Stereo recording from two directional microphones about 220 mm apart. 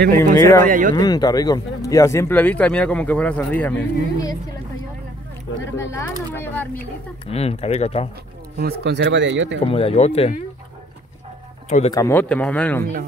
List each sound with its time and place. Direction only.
0.1 s speech: 10° left (ahead or behind)
0.7 s speech: 35° right (ahead or behind)
0.9 s speech: 20° left (ahead or behind)
5.8 s speech: 10° left (ahead or behind)
7.2 s speech: 30° left (ahead or behind)
8.5 s speech: 50° right (ahead or behind)
9.7 s speech: 25° left (ahead or behind)
11.9 s speech: 10° left (ahead or behind)